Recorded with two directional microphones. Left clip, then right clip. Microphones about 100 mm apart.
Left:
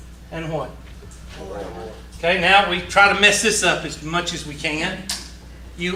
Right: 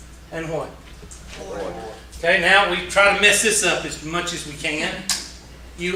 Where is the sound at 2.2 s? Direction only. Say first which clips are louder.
Even; 45° left (ahead or behind).